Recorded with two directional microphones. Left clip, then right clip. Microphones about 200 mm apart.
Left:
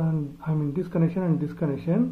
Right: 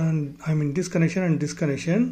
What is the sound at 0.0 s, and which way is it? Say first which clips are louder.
Speech: right 2 dB; 45° right (ahead or behind).